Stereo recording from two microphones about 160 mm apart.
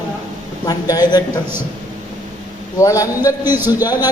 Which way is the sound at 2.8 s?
20° left (ahead or behind).